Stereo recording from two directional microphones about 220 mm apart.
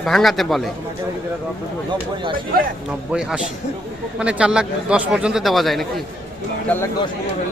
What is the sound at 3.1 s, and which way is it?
Speech, 5° right (ahead or behind).